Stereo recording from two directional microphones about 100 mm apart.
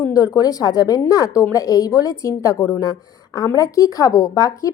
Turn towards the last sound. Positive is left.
turn(degrees=35)  # may be behind; listen again after turning